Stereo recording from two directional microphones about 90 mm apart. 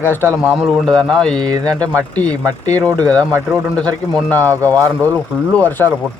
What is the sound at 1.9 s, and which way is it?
Speech, 15° left (ahead or behind).